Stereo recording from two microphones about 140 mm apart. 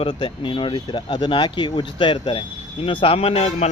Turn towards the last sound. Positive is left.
turn(degrees=45)  # may be behind; listen again after turning